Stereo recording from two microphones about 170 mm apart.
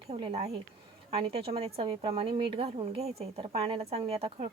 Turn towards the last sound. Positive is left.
turn(degrees=-35)  # may be behind; listen again after turning